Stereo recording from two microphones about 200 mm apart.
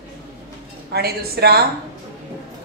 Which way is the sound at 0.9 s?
50° right (ahead or behind).